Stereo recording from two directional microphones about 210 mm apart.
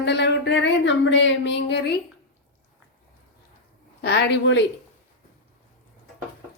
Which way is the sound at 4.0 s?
50° left (ahead or behind).